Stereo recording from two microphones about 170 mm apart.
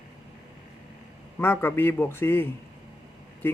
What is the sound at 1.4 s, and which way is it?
Speech, 15° left (ahead or behind).